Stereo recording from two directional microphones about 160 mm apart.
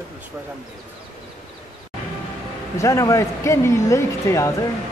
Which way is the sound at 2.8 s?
20° left (ahead or behind).